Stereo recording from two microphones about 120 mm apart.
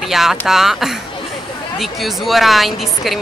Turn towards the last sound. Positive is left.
turn(degrees=0)  # may be behind; listen again after turning